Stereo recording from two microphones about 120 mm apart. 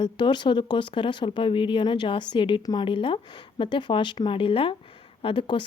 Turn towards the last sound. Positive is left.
turn(degrees=45)  # may be behind; listen again after turning